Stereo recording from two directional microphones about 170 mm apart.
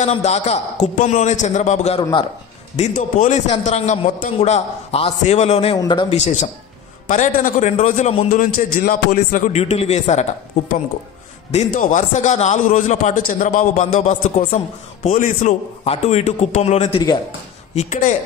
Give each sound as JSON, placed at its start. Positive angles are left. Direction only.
{"t": 0.0, "sound": "a man's voice", "side_deg": 40}
{"t": 6.1, "sound": "a man's voice", "side_deg": 45}
{"t": 8.3, "sound": "a man's voice", "side_deg": 55}
{"t": 11.5, "sound": "a man's voice", "side_deg": 45}